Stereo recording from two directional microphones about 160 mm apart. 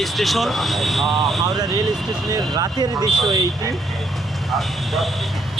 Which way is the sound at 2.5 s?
25° right (ahead or behind).